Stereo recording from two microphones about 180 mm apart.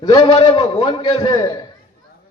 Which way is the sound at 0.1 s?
20° left (ahead or behind).